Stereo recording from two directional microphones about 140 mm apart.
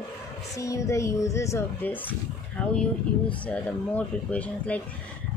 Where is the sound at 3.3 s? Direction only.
10° left (ahead or behind).